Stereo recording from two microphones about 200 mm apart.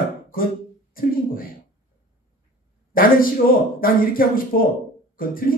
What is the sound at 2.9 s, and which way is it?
A man's voice, 45° left (ahead or behind).